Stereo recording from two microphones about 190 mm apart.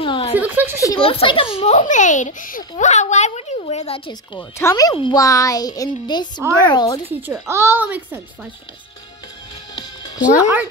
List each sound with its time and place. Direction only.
0.0 s a sound: 30° left (ahead or behind)
0.4 s a child's voice: 10° right (ahead or behind)
0.8 s a child's voice: 25° left (ahead or behind)
7.1 s a child's voice: 10° right (ahead or behind)
9.8 s music: 20° left (ahead or behind)